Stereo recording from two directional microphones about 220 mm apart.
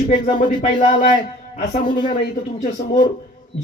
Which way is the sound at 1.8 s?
20° left (ahead or behind).